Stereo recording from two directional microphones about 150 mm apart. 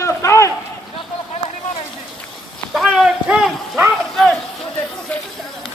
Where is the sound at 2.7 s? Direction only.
5° right (ahead or behind).